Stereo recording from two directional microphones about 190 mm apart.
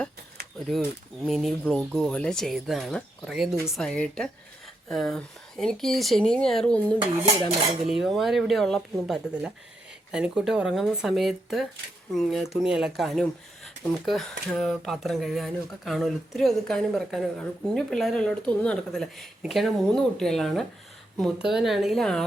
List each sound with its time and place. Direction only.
0.4 s a sound: 50° right (ahead or behind)
1.2 s speech: centre (ahead or behind)
7.3 s dishes: 30° right (ahead or behind)
7.9 s speech: centre (ahead or behind)